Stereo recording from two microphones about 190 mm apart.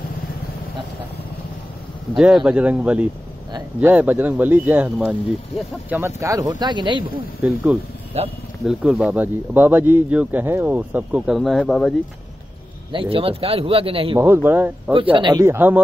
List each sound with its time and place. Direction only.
2.1 s speech: 5° right (ahead or behind); by 7.1 s 25° right (ahead or behind)
7.4 s speech: centre (ahead or behind)
8.2 s speech: 35° right (ahead or behind)
8.6 s speech: 5° right (ahead or behind)
12.9 s speech: 30° right (ahead or behind)
14.2 s speech: 10° right (ahead or behind)
15.1 s speech: 20° right (ahead or behind)